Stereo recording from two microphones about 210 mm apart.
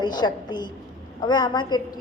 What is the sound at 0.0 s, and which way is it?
A woman's voice, 20° left (ahead or behind).